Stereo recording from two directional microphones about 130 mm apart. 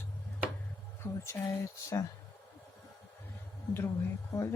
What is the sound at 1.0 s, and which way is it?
Speech, 20° left (ahead or behind).